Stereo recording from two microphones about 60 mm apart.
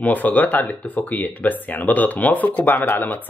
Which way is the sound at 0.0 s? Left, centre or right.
Left.